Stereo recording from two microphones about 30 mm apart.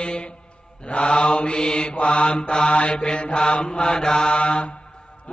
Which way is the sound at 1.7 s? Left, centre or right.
Left.